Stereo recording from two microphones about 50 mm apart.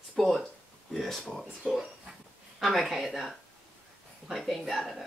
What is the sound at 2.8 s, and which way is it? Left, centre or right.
Speech, centre.